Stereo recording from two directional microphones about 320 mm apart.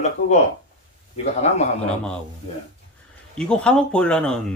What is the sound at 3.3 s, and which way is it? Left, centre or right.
Speech, centre.